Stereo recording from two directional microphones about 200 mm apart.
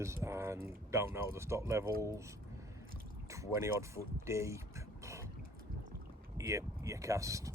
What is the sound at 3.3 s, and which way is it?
Speech, 15° right (ahead or behind).